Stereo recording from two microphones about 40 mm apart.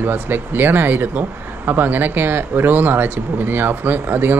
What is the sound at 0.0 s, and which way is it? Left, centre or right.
Speech, right.